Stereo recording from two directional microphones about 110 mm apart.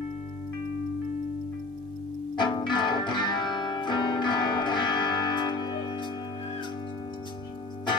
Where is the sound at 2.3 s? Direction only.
45° left (ahead or behind).